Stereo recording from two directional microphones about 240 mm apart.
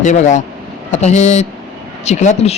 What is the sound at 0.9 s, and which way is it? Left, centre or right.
Speech, left.